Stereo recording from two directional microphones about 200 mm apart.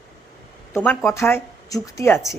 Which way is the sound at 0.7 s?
10° left (ahead or behind).